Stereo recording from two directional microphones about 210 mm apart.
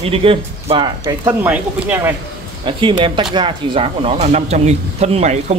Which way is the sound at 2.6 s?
25° right (ahead or behind).